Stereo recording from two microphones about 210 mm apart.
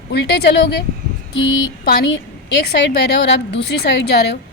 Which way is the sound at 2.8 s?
50° left (ahead or behind).